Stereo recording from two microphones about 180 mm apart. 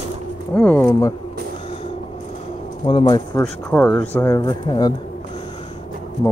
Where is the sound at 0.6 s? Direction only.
10° left (ahead or behind).